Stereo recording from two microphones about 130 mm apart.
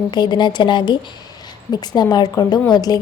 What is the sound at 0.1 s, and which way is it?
A woman's voice, 35° left (ahead or behind).